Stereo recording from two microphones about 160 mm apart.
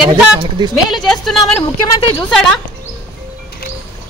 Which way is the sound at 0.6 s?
30° right (ahead or behind).